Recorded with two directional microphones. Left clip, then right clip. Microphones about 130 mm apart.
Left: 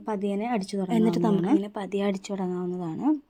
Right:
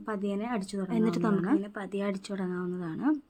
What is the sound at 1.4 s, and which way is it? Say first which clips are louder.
Speech: left 4 dB; 35° left (ahead or behind).